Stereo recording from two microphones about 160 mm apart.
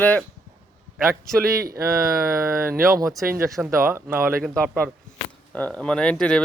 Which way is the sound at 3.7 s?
15° right (ahead or behind).